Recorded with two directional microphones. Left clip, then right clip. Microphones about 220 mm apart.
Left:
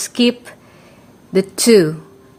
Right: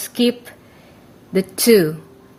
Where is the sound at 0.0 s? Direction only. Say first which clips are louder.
Left 2 dB; 20° left (ahead or behind).